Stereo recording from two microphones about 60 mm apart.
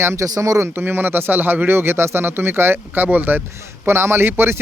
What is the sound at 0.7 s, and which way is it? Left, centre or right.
Speech, right.